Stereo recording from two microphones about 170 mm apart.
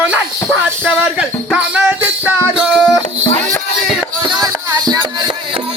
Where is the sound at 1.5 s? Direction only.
5° right (ahead or behind).